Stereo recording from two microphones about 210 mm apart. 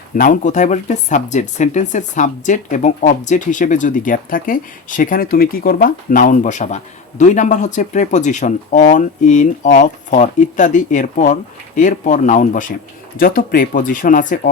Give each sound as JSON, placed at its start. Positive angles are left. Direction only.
{"t": 0.2, "sound": "speech", "side_deg": 35}